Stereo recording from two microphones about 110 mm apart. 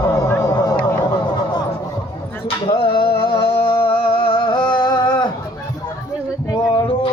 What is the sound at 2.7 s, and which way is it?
Music, 50° left (ahead or behind).